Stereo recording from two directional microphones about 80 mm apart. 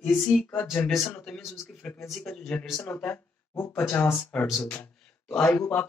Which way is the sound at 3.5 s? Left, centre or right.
Left.